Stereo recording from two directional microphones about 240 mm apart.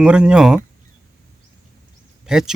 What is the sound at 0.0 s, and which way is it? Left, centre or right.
Speech, centre.